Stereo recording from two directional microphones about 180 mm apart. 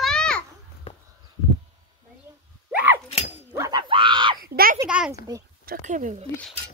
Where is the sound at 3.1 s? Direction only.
35° left (ahead or behind).